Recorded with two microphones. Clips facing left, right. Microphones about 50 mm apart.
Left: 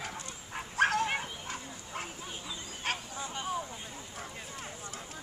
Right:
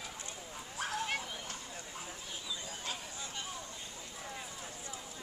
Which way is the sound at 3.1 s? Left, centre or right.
Left.